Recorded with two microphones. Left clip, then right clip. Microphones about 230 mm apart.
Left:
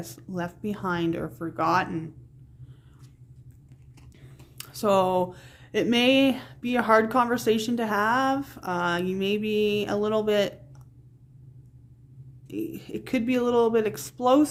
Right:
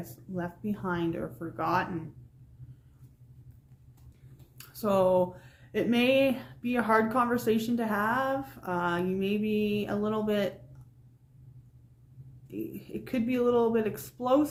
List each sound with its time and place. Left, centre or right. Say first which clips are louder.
0.0 s speech: left 4 dB; left
4.5 s speech: left 5 dB; left
12.5 s speech: left 5 dB; left